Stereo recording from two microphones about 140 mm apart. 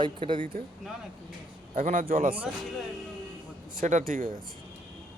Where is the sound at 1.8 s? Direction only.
70° right (ahead or behind).